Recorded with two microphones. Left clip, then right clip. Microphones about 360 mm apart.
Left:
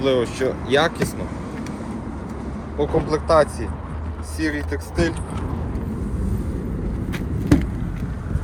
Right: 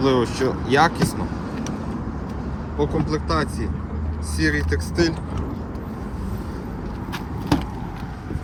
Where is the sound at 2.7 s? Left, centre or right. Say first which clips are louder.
Left 3 dB; centre.